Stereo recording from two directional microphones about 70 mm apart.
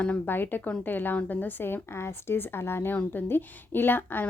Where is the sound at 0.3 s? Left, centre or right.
Left.